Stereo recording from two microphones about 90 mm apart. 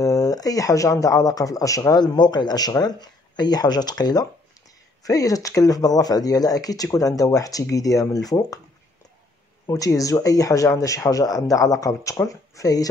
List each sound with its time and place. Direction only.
0.0 s speech: 40° left (ahead or behind)
2.0 s speech: 55° left (ahead or behind)
9.7 s speech: 40° left (ahead or behind)